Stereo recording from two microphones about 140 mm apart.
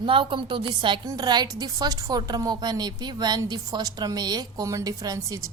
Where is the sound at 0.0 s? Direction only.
35° right (ahead or behind).